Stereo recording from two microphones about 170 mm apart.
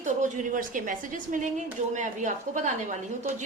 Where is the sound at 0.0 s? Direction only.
50° right (ahead or behind).